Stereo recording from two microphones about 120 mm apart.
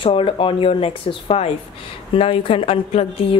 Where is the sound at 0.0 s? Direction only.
45° left (ahead or behind).